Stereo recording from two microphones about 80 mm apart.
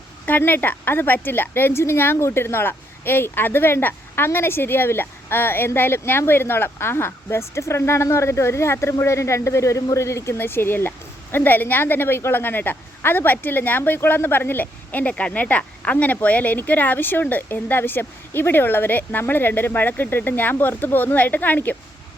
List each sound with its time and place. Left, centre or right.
0.3 s a woman's voice: left